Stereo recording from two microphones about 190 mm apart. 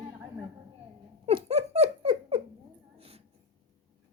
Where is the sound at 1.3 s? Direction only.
35° right (ahead or behind).